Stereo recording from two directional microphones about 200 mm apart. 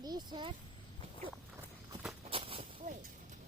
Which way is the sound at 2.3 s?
25° right (ahead or behind).